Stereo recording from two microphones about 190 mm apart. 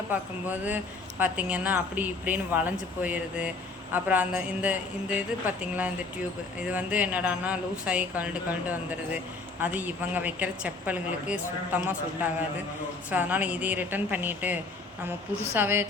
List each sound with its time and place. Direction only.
0.1 s a woman's voice: 10° right (ahead or behind)